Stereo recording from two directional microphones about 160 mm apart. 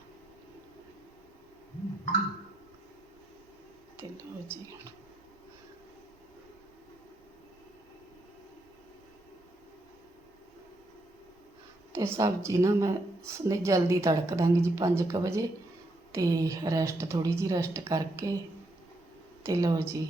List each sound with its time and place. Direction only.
11.9 s a woman's voice: 20° right (ahead or behind)
19.4 s a woman's voice: 20° right (ahead or behind)